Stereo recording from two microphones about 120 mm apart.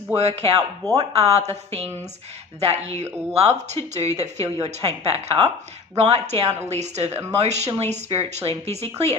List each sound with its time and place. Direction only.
0.2 s speech: 60° right (ahead or behind)